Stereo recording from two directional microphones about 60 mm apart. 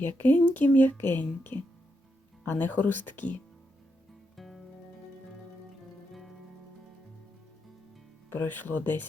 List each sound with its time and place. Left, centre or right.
0.0 s speech: left
4.4 s music: centre
8.3 s speech: left